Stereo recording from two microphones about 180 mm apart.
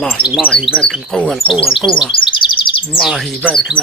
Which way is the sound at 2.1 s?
25° left (ahead or behind).